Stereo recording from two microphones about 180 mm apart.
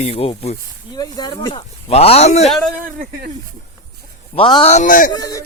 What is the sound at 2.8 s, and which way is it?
Speech, 50° right (ahead or behind).